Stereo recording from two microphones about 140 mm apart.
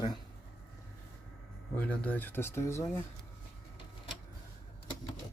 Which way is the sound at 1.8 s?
10° left (ahead or behind).